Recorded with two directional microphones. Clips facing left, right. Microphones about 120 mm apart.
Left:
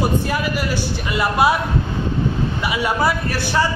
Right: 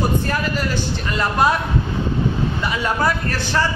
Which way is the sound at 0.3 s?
10° left (ahead or behind).